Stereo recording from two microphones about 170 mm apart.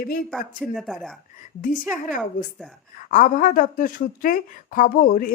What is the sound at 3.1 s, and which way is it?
A woman's voice, 55° left (ahead or behind).